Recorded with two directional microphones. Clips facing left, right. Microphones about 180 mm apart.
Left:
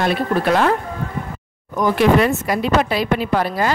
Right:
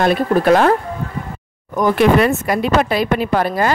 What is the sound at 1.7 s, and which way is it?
Speech, 55° right (ahead or behind).